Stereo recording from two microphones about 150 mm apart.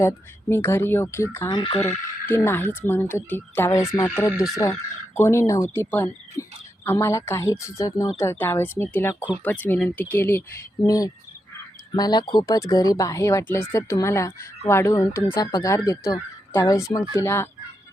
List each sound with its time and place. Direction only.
0.0 s speech: 15° left (ahead or behind)
1.5 s speech: 30° left (ahead or behind)
1.9 s speech: 10° left (ahead or behind)